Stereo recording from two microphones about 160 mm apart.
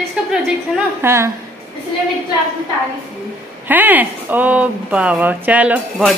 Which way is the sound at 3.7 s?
10° right (ahead or behind).